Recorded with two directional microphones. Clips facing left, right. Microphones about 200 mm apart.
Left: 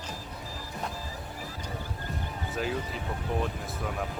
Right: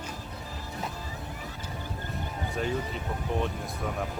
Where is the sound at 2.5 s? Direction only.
Centre (ahead or behind).